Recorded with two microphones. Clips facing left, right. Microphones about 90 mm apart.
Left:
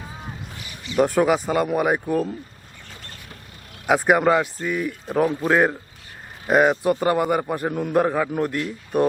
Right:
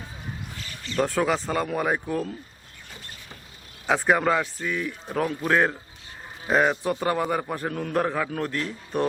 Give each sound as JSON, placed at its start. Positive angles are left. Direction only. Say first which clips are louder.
{"t": 0.6, "sound": "a man's voice", "louder": "left 6 dB", "side_deg": 15}
{"t": 3.8, "sound": "a man's voice", "louder": "left 4 dB", "side_deg": 10}
{"t": 5.2, "sound": "a man's voice", "louder": "left 4 dB", "side_deg": 25}